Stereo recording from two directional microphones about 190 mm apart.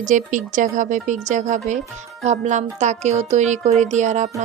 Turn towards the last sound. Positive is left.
turn(degrees=-40)  # may be behind; listen again after turning